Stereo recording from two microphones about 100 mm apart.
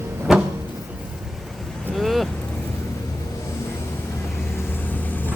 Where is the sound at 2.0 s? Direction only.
Centre (ahead or behind).